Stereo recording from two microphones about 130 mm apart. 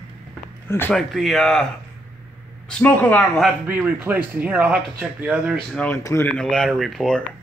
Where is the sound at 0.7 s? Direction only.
15° left (ahead or behind).